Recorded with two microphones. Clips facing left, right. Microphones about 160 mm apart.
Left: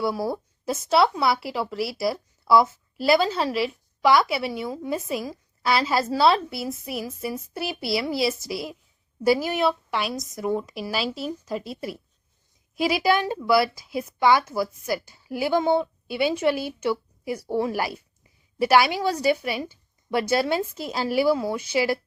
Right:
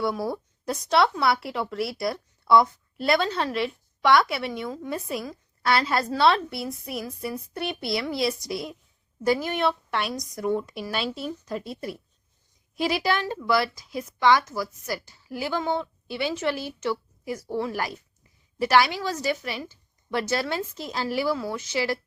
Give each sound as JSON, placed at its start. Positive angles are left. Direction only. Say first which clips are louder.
{"t": 0.0, "sound": "a woman's voice", "louder": "left 1 dB", "side_deg": 0}